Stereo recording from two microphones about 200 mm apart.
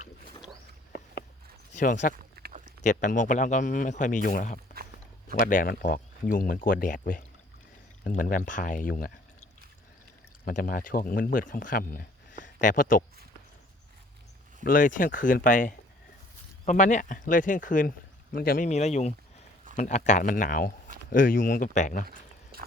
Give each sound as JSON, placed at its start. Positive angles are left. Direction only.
{"t": 1.7, "sound": "speech", "side_deg": 40}
{"t": 2.4, "sound": "a sound", "side_deg": -50}
{"t": 2.8, "sound": "speech", "side_deg": 40}
{"t": 10.4, "sound": "speech", "side_deg": 45}
{"t": 14.6, "sound": "speech", "side_deg": 45}
{"t": 22.5, "sound": "biting", "side_deg": -50}